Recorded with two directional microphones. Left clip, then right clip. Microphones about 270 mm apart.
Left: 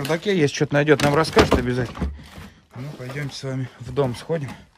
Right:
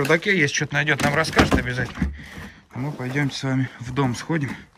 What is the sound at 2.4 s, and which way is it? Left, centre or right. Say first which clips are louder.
Speech: right 8 dB; centre.